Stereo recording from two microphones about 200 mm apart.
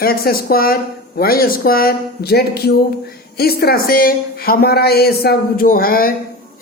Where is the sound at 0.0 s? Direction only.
50° left (ahead or behind).